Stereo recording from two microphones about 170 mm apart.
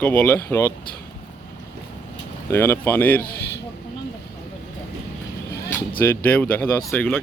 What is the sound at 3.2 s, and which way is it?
Speech, 65° left (ahead or behind).